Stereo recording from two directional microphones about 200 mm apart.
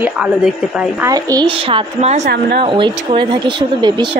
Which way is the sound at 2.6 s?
25° right (ahead or behind).